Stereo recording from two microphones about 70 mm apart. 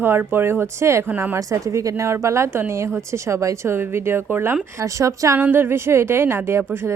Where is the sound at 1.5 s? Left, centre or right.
Right.